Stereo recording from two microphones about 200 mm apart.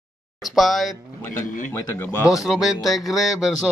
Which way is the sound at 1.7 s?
15° left (ahead or behind).